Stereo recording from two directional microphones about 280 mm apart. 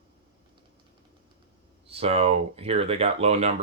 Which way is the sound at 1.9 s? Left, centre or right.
Right.